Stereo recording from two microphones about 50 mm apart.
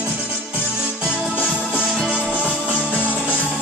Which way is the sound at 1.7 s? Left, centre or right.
Centre.